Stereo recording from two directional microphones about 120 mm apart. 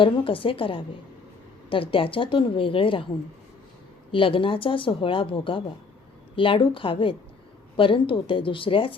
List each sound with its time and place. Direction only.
0.0 s speech: 45° left (ahead or behind)
4.1 s speech: 45° left (ahead or behind)